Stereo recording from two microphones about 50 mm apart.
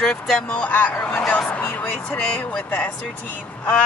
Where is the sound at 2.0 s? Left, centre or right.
Centre.